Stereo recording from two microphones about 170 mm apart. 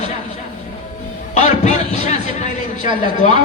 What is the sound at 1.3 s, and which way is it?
Speech, 40° left (ahead or behind).